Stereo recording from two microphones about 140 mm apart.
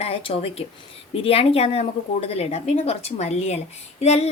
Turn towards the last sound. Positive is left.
turn(degrees=50)  # may be behind; listen again after turning